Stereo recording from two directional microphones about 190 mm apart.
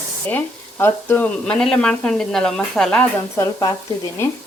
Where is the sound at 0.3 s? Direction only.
10° left (ahead or behind).